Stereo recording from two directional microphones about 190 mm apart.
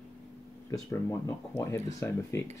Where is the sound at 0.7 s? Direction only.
15° left (ahead or behind).